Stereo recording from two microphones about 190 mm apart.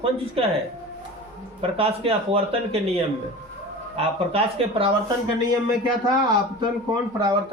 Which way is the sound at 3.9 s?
30° right (ahead or behind).